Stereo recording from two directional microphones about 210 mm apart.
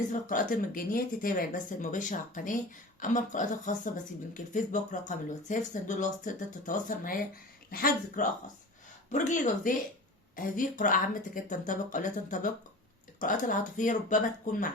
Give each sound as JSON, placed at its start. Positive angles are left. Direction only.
{"t": 0.1, "sound": "speech", "side_deg": 40}